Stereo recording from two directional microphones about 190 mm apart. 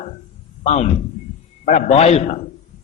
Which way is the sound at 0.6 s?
35° left (ahead or behind).